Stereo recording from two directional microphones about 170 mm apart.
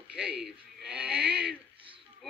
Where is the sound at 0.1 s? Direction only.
5° right (ahead or behind).